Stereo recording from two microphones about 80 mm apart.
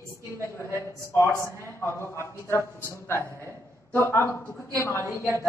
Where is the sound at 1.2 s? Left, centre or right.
Left.